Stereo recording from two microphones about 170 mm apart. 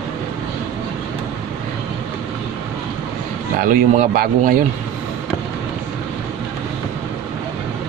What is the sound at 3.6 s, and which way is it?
Speech, 60° right (ahead or behind).